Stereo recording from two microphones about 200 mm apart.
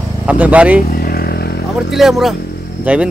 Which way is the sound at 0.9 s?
50° left (ahead or behind).